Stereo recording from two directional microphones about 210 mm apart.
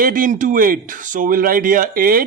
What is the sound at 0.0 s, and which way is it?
Speech, 40° right (ahead or behind).